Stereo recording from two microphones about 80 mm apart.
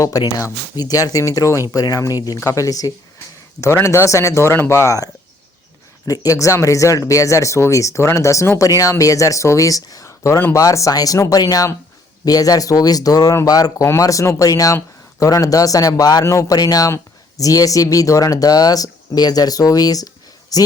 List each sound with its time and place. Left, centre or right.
0.0 s speech: left
6.1 s speech: left
16.2 s speech: left